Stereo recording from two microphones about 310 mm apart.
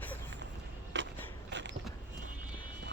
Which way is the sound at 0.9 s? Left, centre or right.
Right.